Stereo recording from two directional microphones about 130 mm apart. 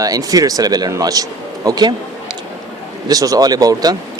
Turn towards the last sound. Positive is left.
turn(degrees=-30)  # may be behind; listen again after turning